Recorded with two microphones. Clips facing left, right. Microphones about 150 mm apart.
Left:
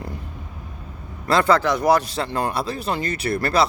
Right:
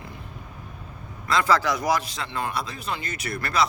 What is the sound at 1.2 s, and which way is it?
Speech, 30° left (ahead or behind).